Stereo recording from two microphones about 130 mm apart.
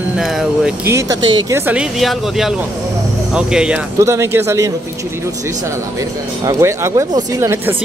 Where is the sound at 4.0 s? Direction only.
20° right (ahead or behind).